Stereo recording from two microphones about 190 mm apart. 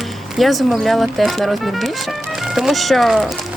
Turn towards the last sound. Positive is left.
turn(degrees=0)  # may be behind; listen again after turning